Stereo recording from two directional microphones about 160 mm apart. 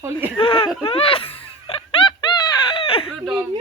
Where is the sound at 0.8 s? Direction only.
35° left (ahead or behind).